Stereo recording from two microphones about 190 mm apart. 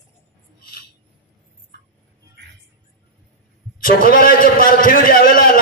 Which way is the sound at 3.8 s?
50° left (ahead or behind).